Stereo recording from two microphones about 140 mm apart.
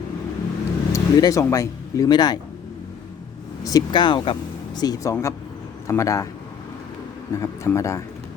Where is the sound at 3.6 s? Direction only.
25° left (ahead or behind).